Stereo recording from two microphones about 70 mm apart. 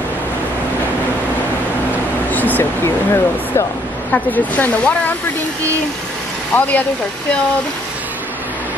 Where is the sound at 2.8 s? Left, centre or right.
Left.